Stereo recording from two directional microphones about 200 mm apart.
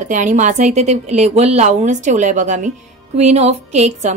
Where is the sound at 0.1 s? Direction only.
40° right (ahead or behind).